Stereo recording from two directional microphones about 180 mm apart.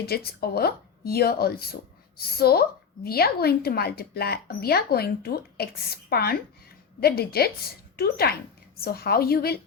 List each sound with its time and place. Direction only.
0.0 s speech: 60° left (ahead or behind)